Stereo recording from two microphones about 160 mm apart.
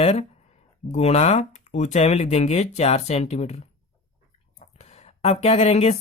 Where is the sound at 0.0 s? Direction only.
40° left (ahead or behind).